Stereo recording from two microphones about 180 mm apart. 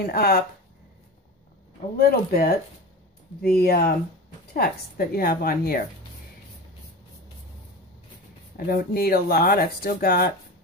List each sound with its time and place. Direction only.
0.0 s speech: 60° left (ahead or behind)
2.0 s speech: 55° left (ahead or behind)
8.5 s speech: 55° left (ahead or behind)